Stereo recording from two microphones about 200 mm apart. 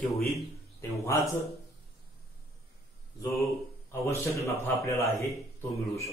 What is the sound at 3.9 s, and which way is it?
A man's voice, 10° left (ahead or behind).